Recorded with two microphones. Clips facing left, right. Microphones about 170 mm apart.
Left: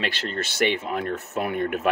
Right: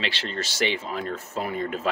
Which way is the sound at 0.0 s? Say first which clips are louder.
Left 2 dB; 50° left (ahead or behind).